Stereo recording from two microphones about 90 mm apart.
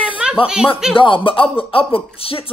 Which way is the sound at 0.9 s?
75° left (ahead or behind).